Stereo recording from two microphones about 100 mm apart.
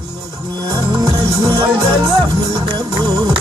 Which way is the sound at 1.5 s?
55° right (ahead or behind).